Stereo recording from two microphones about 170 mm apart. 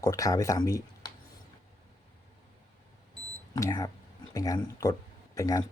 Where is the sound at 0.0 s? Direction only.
20° left (ahead or behind).